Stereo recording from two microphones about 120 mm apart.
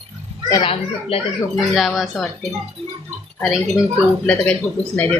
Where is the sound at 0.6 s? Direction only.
50° left (ahead or behind).